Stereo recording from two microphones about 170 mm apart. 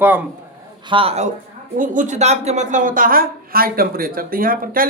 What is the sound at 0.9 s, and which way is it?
Speech, 35° right (ahead or behind).